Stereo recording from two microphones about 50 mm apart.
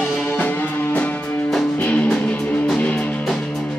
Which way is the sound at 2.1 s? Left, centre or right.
Left.